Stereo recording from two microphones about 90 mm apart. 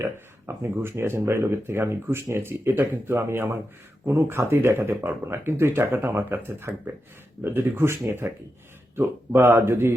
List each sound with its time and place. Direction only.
0.0 s speech: 30° right (ahead or behind)